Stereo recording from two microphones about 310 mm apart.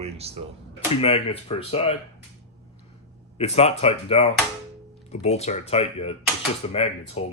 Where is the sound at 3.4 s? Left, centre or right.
Centre.